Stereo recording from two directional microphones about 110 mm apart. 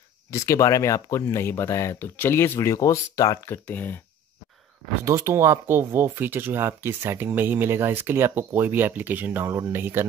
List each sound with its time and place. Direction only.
0.3 s speech: 30° left (ahead or behind)
5.0 s speech: 25° right (ahead or behind)